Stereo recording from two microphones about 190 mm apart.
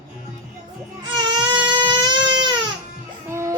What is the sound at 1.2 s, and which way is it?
Baby cry, 25° right (ahead or behind).